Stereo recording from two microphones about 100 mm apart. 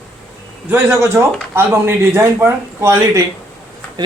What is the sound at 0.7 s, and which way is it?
A man's voice, 25° right (ahead or behind).